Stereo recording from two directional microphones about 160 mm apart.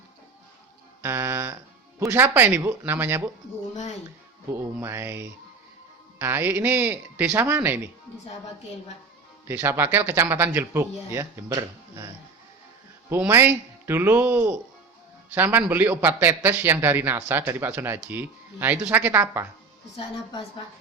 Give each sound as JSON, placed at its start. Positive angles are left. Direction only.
{"t": 1.0, "sound": "a sound", "side_deg": -15}
{"t": 2.0, "sound": "speech", "side_deg": -10}
{"t": 4.7, "sound": "speech", "side_deg": -15}
{"t": 9.5, "sound": "speech", "side_deg": -15}